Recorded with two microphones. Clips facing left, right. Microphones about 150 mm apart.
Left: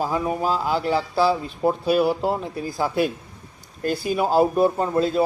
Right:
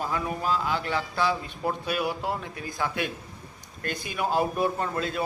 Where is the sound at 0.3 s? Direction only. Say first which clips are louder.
Left 5 dB; 40° left (ahead or behind).